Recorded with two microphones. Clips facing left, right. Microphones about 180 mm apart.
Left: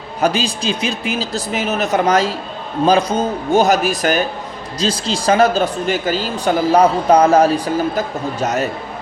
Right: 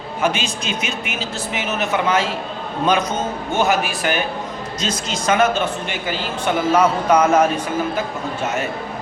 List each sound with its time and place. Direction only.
0.2 s speech: 35° left (ahead or behind)